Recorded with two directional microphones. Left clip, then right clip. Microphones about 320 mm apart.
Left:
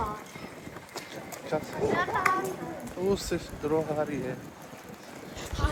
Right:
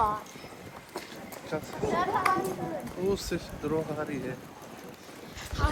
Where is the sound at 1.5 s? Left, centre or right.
Centre.